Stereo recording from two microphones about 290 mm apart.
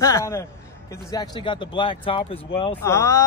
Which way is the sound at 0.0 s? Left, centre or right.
Centre.